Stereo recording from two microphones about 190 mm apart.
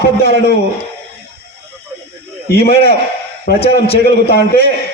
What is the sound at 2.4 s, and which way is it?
A man's voice, 55° left (ahead or behind).